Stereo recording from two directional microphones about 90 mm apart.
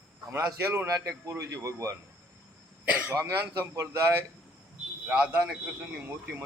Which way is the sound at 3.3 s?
30° right (ahead or behind).